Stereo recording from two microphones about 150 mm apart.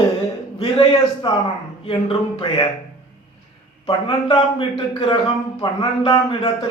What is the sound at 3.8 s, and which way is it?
A man's voice, 35° left (ahead or behind).